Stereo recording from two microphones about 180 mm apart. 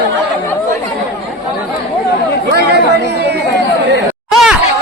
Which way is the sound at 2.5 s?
65° right (ahead or behind).